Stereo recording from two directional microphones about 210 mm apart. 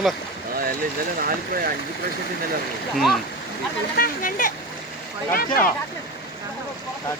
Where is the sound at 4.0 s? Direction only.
40° left (ahead or behind).